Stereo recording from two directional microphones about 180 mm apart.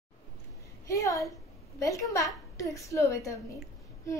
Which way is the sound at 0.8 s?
15° left (ahead or behind).